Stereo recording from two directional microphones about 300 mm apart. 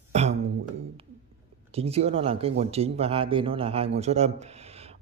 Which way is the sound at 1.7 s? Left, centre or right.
Centre.